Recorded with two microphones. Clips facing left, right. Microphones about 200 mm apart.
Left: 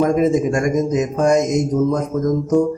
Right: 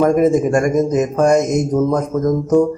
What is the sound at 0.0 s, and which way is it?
A man's voice, 55° right (ahead or behind).